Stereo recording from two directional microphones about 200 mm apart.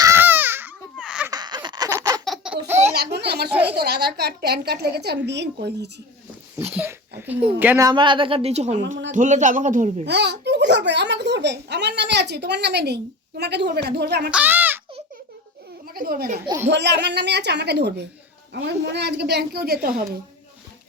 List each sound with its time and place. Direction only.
0.0 s baby cry: 10° right (ahead or behind)
1.3 s a sound: 20° right (ahead or behind)
2.2 s laughter: centre (ahead or behind)
2.9 s a sound: 55° right (ahead or behind)
3.5 s a woman's voice: 10° right (ahead or behind)
3.8 s a woman's voice: 55° right (ahead or behind)
6.6 s a sound: 10° right (ahead or behind)
7.2 s a woman's voice: 10° right (ahead or behind); by 10.1 s 40° right (ahead or behind)
10.1 s a child's voice: 55° right (ahead or behind)
14.3 s speech: 10° right (ahead or behind)
16.0 s a child's voice: 50° right (ahead or behind)